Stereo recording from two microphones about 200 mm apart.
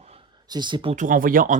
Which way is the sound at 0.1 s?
20° right (ahead or behind).